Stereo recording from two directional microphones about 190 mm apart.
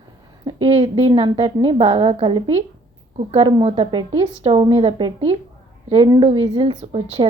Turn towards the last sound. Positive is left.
turn(degrees=-30)  # may be behind; listen again after turning